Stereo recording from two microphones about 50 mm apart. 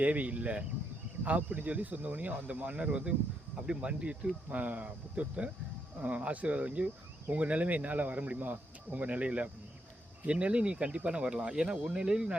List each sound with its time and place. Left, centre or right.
0.0 s speech: right